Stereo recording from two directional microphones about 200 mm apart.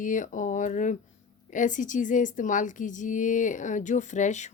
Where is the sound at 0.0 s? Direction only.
40° left (ahead or behind).